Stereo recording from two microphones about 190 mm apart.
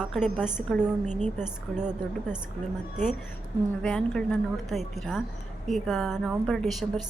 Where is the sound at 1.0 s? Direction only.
40° right (ahead or behind).